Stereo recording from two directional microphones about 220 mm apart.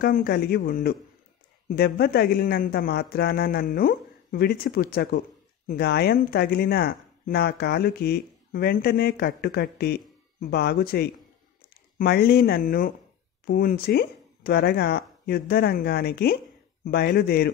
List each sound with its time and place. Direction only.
0.0 s speech: 45° left (ahead or behind)